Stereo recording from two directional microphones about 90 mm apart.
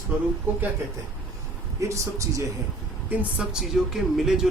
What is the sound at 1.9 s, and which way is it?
Speech, 35° right (ahead or behind).